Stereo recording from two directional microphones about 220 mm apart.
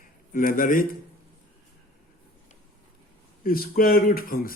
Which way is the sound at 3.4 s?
40° left (ahead or behind).